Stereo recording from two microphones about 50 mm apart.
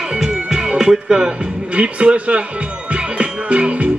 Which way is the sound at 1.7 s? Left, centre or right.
Right.